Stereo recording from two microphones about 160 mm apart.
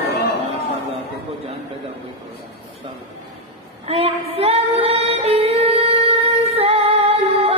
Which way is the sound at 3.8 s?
35° right (ahead or behind).